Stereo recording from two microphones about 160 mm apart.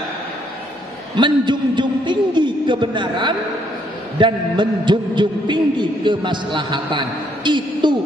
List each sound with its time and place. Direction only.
1.1 s a man's voice: 30° right (ahead or behind)